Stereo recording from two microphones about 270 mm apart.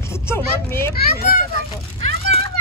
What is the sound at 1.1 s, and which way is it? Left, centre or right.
Children playing, left.